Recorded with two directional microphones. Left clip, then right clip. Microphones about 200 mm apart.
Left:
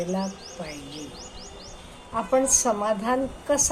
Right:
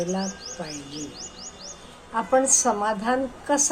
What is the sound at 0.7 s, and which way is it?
Speech, 50° right (ahead or behind).